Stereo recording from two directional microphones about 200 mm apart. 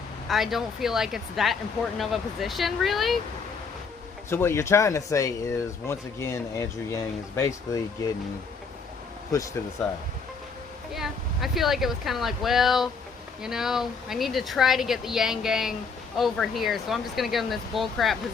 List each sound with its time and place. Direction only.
0.3 s speech: centre (ahead or behind)
4.3 s speech: 10° left (ahead or behind)
9.3 s speech: 15° left (ahead or behind)
10.9 s speech: centre (ahead or behind)